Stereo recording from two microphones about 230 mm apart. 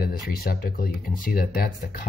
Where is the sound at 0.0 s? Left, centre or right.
Left.